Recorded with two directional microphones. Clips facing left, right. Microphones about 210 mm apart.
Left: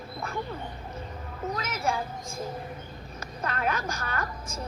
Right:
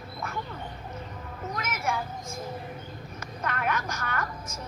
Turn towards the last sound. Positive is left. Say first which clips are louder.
# even
turn(degrees=30)  # may be behind; listen again after turning